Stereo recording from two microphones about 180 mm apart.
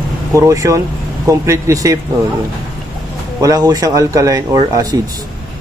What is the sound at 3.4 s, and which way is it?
Speech, 20° right (ahead or behind).